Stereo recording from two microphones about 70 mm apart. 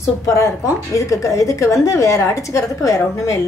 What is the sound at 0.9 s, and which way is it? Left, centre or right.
A woman's voice, left.